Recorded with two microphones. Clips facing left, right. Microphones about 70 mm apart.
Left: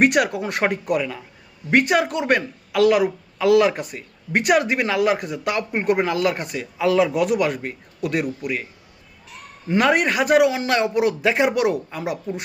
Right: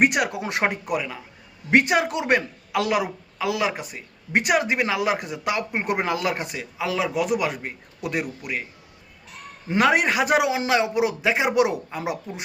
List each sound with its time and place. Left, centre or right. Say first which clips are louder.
0.0 s speech: left 3 dB; centre
1.7 s a man's voice: left 1 dB; right
6.0 s speech: left 4 dB; right
6.7 s speech: left 6 dB; centre
7.3 s speech: left 4 dB; centre
9.6 s speech: left 1 dB; centre